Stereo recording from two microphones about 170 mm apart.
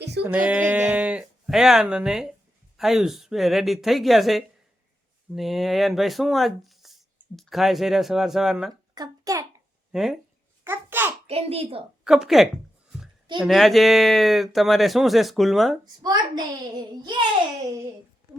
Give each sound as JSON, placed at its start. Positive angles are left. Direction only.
{"t": 0.0, "sound": "a sound", "side_deg": -75}
{"t": 0.3, "sound": "speech", "side_deg": -10}
{"t": 8.7, "sound": "a child's voice", "side_deg": -20}
{"t": 9.9, "sound": "speech", "side_deg": 0}
{"t": 10.6, "sound": "babbling", "side_deg": -10}
{"t": 11.3, "sound": "a child's voice", "side_deg": -35}
{"t": 12.0, "sound": "speech", "side_deg": 0}
{"t": 16.0, "sound": "a woman's voice", "side_deg": -25}